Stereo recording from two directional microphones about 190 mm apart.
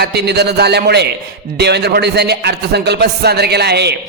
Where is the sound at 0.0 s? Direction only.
60° right (ahead or behind).